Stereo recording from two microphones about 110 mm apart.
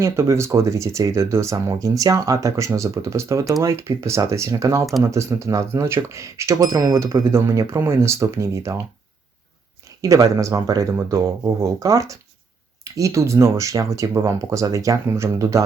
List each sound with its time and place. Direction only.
0.0 s speech: 25° right (ahead or behind)
10.0 s speech: 30° right (ahead or behind)